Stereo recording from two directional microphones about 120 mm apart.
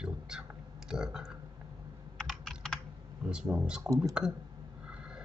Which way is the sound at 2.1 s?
5° left (ahead or behind).